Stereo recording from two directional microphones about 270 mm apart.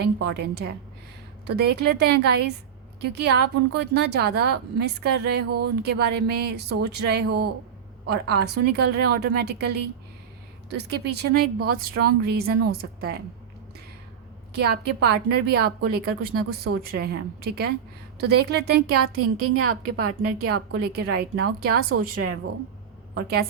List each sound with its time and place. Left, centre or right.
0.0 s a woman's voice: right
14.5 s a woman's voice: right
19.2 s a woman's voice: right
20.7 s a woman's voice: right
23.1 s a woman's voice: right